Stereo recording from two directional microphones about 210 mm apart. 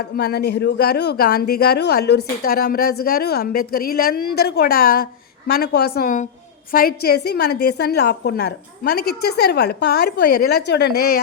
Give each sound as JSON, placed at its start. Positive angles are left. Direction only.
{"t": 0.0, "sound": "a woman's voice", "side_deg": 50}